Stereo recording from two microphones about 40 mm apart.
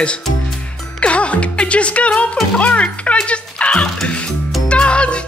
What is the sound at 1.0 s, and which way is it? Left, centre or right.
Speech, left.